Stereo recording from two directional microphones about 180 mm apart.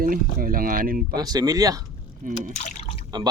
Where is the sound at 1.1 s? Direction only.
20° right (ahead or behind).